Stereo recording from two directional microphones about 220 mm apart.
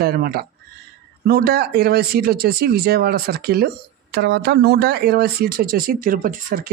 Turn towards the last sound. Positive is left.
turn(degrees=-40)  # may be behind; listen again after turning